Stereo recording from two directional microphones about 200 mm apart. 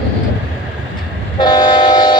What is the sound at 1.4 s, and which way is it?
Train, 20° left (ahead or behind).